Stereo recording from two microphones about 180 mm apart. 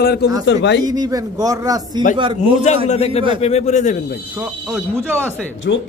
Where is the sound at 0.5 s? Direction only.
75° left (ahead or behind).